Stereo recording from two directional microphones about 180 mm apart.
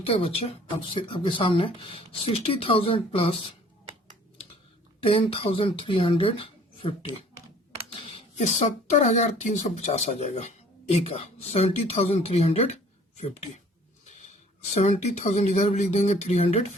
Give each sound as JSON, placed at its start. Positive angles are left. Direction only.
{"t": 0.0, "sound": "speech", "side_deg": 30}
{"t": 5.0, "sound": "speech", "side_deg": 30}
{"t": 8.9, "sound": "speech", "side_deg": 40}
{"t": 14.3, "sound": "speech", "side_deg": 40}